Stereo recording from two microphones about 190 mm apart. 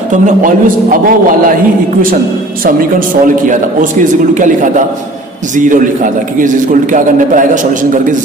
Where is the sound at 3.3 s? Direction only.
45° right (ahead or behind).